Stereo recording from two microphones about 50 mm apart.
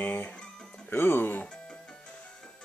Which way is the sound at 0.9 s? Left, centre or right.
Left.